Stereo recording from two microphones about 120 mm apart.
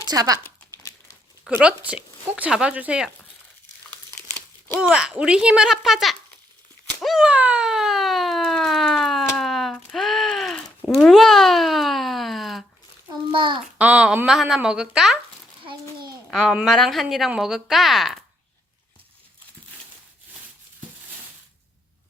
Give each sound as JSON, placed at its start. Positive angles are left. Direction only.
{"t": 0.1, "sound": "a child's voice", "side_deg": -30}
{"t": 1.5, "sound": "speech", "side_deg": -10}
{"t": 4.8, "sound": "speech", "side_deg": -5}
{"t": 7.0, "sound": "a sound", "side_deg": 0}
{"t": 13.3, "sound": "a child's voice", "side_deg": -40}
{"t": 13.7, "sound": "speech", "side_deg": -10}
{"t": 15.6, "sound": "a sound", "side_deg": -40}
{"t": 16.3, "sound": "a woman's voice", "side_deg": 0}